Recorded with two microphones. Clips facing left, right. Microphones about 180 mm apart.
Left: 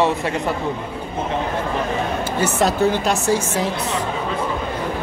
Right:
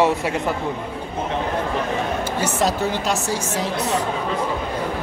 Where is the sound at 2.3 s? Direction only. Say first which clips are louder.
Left 4 dB; 60° left (ahead or behind).